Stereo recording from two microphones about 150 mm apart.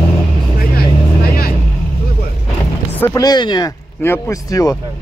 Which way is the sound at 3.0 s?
25° left (ahead or behind).